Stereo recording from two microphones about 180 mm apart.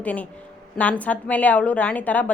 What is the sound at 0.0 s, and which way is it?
A woman's voice, 10° left (ahead or behind).